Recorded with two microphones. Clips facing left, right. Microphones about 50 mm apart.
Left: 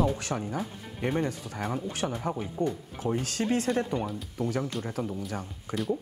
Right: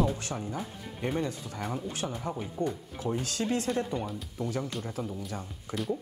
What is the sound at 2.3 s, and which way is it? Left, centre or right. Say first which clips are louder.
Speech: left 2 dB; centre.